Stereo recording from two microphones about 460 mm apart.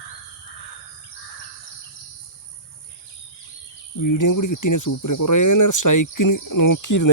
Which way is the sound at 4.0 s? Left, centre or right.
Left.